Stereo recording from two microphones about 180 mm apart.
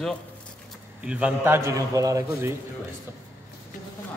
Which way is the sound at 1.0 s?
5° right (ahead or behind).